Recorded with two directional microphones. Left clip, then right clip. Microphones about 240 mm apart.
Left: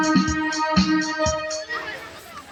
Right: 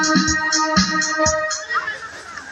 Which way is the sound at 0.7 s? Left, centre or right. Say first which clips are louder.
Right 3 dB; centre.